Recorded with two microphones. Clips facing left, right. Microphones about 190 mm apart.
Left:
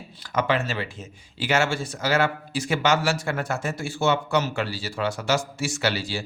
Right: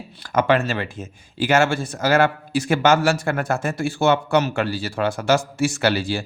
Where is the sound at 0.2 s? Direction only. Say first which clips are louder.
Right 5 dB; 55° right (ahead or behind).